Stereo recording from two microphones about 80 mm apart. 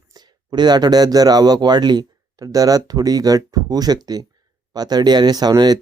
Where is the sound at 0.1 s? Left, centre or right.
Right.